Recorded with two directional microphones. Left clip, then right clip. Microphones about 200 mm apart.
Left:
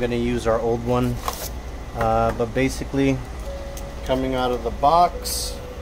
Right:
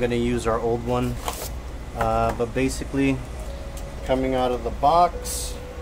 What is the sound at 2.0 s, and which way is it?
Speech, 15° left (ahead or behind).